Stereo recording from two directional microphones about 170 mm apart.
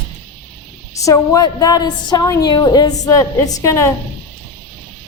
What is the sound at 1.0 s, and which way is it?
A woman's voice, 20° left (ahead or behind).